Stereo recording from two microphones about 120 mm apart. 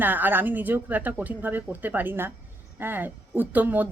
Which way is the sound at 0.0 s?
15° right (ahead or behind).